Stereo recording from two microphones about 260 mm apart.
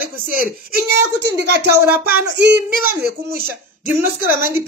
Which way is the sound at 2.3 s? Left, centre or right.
Right.